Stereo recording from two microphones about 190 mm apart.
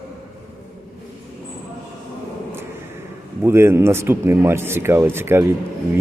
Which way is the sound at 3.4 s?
15° right (ahead or behind).